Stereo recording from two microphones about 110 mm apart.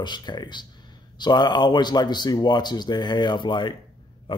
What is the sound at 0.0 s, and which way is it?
Speech, 45° left (ahead or behind).